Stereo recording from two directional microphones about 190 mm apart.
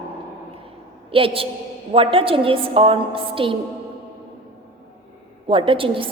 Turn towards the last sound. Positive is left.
turn(degrees=-30)  # may be behind; listen again after turning